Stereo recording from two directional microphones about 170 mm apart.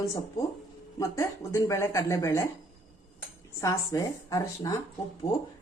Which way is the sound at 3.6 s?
20° left (ahead or behind).